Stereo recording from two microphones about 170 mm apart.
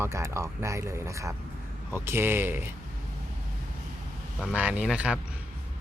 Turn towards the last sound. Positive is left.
turn(degrees=-5)  # may be behind; listen again after turning